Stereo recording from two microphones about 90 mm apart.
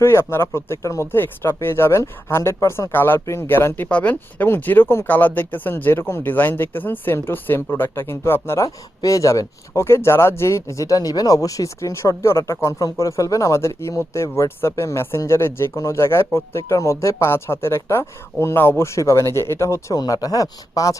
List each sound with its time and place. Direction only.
0.0 s speech: 30° left (ahead or behind)
3.8 s speech: 15° left (ahead or behind)
4.1 s speech: 25° left (ahead or behind)
20.0 s speech: 45° left (ahead or behind)